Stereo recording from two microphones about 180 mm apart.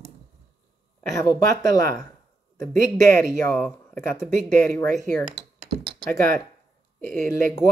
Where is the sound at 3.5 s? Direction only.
5° left (ahead or behind).